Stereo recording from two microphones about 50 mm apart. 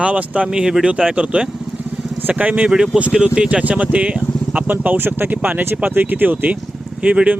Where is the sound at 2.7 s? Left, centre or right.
Centre; by 4.9 s right.